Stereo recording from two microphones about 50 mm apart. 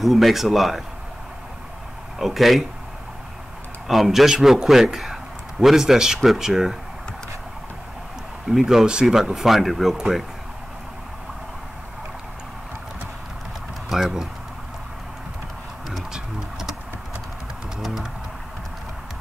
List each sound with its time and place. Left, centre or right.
0.0 s speech: centre
2.1 s speech: centre
3.8 s a man's voice: centre
8.5 s a man's voice: centre
13.8 s speech: centre
16.1 s pigeon: centre